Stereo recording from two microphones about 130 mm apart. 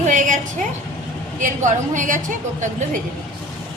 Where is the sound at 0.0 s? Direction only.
80° right.